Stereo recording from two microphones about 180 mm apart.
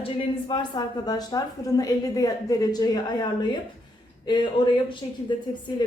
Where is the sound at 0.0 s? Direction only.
30° left (ahead or behind).